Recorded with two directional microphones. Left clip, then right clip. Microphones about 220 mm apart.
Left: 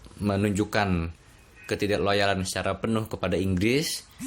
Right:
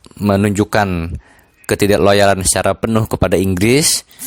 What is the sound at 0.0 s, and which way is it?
Speech, 45° right (ahead or behind).